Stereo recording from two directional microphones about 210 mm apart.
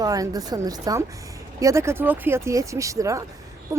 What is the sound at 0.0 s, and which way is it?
Speech, 15° right (ahead or behind).